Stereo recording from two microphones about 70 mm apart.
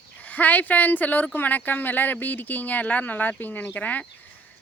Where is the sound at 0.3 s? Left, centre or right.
Left.